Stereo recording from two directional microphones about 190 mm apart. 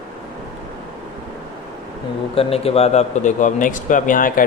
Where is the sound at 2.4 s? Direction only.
30° left (ahead or behind).